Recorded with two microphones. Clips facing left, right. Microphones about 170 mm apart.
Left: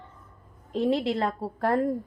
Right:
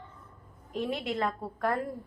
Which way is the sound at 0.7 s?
30° left (ahead or behind).